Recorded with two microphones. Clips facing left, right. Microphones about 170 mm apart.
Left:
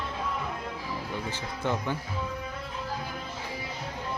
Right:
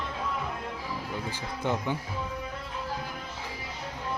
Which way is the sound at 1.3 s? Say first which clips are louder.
Right 1 dB; 15° right (ahead or behind).